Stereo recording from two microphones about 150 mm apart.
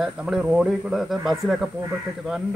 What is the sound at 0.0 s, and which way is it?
Speech, 5° right (ahead or behind).